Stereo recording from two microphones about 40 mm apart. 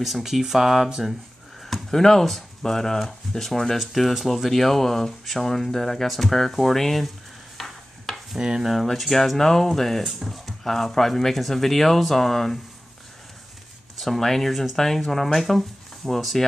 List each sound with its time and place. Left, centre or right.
0.0 s speech: centre
1.6 s speech: centre
7.5 s stir: centre
8.4 s speech: centre
8.9 s speech: centre
13.9 s speech: centre